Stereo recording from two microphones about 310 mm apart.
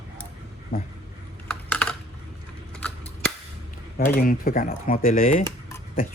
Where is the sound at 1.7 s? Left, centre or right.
Centre.